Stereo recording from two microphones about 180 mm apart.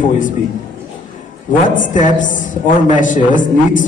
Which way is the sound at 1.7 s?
45° left (ahead or behind).